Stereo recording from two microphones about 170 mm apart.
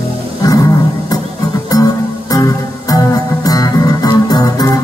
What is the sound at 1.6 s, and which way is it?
Music, 20° left (ahead or behind).